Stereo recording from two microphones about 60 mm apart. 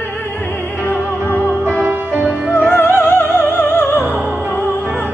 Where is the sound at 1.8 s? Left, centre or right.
Right.